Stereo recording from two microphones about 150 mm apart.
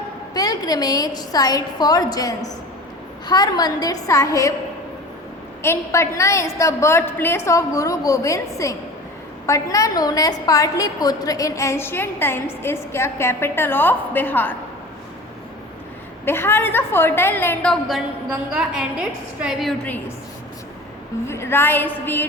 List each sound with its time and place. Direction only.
0.3 s a woman's voice: 25° left (ahead or behind)
5.6 s a woman's voice: 15° left (ahead or behind)
16.2 s a woman's voice: 15° left (ahead or behind); by 19.7 s 5° right (ahead or behind)
19.8 s a woman's voice: 10° left (ahead or behind)
21.2 s a woman's voice: 15° left (ahead or behind)